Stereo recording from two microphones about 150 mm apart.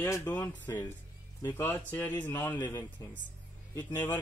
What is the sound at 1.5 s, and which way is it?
A man's voice, 15° left (ahead or behind).